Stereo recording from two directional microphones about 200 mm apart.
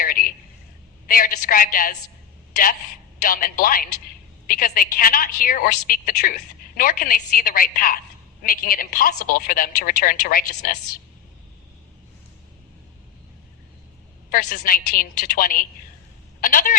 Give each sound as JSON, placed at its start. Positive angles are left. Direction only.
{"t": 0.0, "sound": "a sound", "side_deg": 45}
{"t": 1.0, "sound": "a woman's voice", "side_deg": 45}
{"t": 3.2, "sound": "a woman's voice", "side_deg": 45}
{"t": 14.3, "sound": "a woman's voice", "side_deg": 45}